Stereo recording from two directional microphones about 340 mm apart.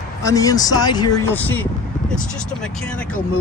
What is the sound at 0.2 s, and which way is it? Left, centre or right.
Speech, centre.